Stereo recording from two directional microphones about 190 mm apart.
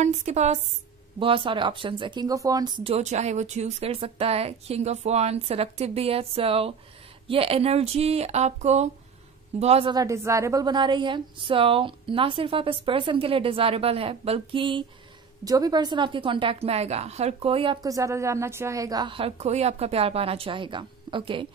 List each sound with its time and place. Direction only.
0.0 s speech: 40° right (ahead or behind)
9.9 s a woman's voice: 15° right (ahead or behind)